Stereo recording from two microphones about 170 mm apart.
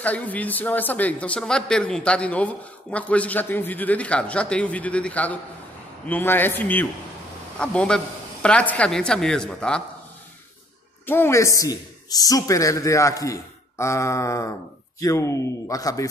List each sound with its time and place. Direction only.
0.0 s a woman's voice: 10° left (ahead or behind)
11.1 s speech: 15° left (ahead or behind)